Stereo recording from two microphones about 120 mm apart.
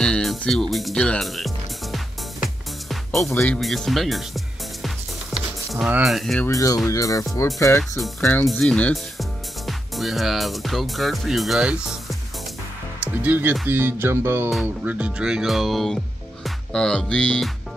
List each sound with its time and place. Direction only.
0.0 s music: 5° left (ahead or behind)
3.3 s speech: 20° left (ahead or behind)
3.5 s speech: 5° left (ahead or behind)
4.8 s music: centre (ahead or behind)
6.0 s speech: centre (ahead or behind)
6.4 s speech: 30° left (ahead or behind); by 12.2 s centre (ahead or behind)
13.0 s music: 15° right (ahead or behind)
14.9 s speech: 10° right (ahead or behind); by 17.5 s 10° left (ahead or behind)